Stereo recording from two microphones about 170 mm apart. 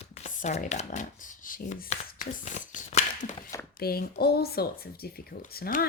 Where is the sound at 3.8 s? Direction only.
65° left (ahead or behind).